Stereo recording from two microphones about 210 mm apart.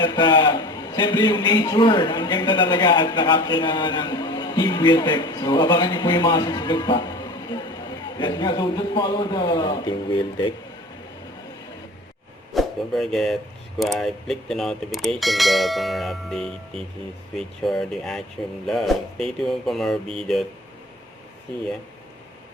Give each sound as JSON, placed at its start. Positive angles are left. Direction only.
{"t": 0.0, "sound": "a man's voice", "side_deg": 20}
{"t": 12.5, "sound": "speech", "side_deg": 0}